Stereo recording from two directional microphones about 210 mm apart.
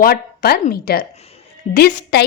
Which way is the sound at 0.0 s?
50° left (ahead or behind).